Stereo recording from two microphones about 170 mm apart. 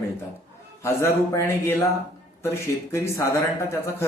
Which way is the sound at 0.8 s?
15° left (ahead or behind).